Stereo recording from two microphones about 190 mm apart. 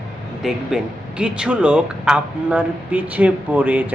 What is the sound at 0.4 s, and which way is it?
Speech, centre (ahead or behind).